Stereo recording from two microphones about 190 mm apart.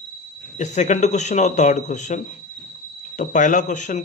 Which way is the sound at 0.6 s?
40° left (ahead or behind).